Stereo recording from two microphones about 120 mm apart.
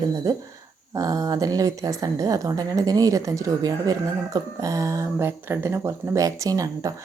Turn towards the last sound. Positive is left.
turn(degrees=-30)  # may be behind; listen again after turning